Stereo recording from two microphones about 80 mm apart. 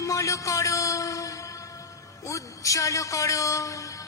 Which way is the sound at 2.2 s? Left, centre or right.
Left.